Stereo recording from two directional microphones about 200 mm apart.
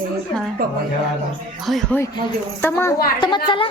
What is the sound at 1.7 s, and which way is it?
Speech, centre (ahead or behind).